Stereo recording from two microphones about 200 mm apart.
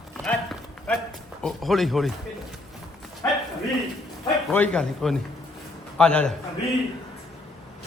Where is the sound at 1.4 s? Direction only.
Centre (ahead or behind).